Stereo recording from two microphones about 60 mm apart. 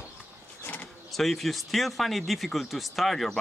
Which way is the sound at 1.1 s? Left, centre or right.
Centre.